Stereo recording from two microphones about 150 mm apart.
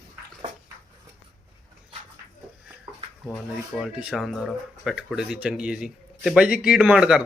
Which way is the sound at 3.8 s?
5° right (ahead or behind).